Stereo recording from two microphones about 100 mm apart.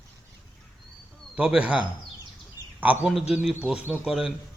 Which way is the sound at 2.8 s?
15° right (ahead or behind).